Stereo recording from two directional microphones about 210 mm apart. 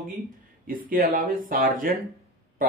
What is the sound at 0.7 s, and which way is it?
Speech, 40° right (ahead or behind).